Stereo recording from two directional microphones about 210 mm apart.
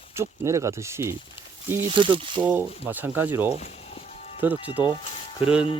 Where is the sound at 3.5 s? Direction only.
30° left (ahead or behind).